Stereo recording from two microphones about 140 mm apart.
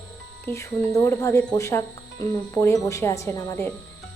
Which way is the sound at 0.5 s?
20° left (ahead or behind).